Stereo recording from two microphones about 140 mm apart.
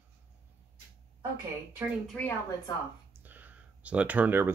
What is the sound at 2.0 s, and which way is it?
Speech, 10° left (ahead or behind).